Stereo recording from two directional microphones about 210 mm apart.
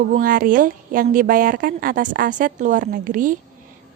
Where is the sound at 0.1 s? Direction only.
40° right (ahead or behind).